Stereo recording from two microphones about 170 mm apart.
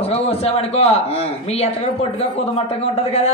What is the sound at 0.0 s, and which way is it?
Speech, 35° left (ahead or behind).